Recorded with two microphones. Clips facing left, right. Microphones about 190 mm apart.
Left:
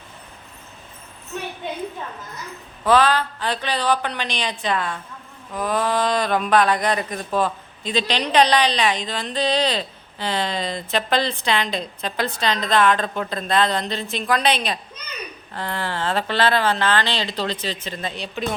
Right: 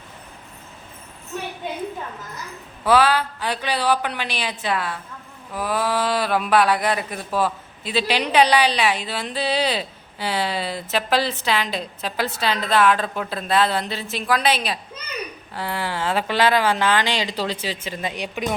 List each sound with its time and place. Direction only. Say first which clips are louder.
2.8 s speech: even; 10° right (ahead or behind)